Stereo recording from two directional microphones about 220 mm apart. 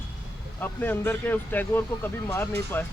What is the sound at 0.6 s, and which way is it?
Speech, 10° left (ahead or behind).